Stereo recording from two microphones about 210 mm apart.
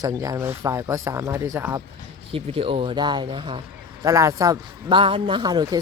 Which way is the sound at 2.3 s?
25° right (ahead or behind).